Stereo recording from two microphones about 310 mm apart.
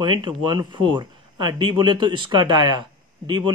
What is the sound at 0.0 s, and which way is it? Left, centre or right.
Speech, centre.